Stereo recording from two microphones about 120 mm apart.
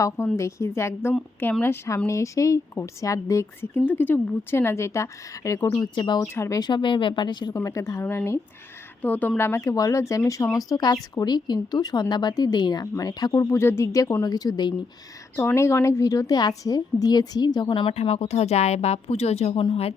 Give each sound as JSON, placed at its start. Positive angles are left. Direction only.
{"t": 0.3, "sound": "speech", "side_deg": 25}
{"t": 5.9, "sound": "a woman's voice", "side_deg": 40}
{"t": 6.2, "sound": "speech", "side_deg": 20}
{"t": 6.6, "sound": "a woman's voice", "side_deg": 40}
{"t": 7.5, "sound": "a woman's voice", "side_deg": 25}
{"t": 15.4, "sound": "speech", "side_deg": 20}
{"t": 17.9, "sound": "speech", "side_deg": 60}